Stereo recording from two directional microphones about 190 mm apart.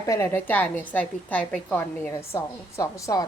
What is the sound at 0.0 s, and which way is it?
A woman's voice, 15° left (ahead or behind).